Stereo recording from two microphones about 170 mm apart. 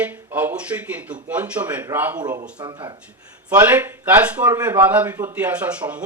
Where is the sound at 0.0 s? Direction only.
10° right (ahead or behind).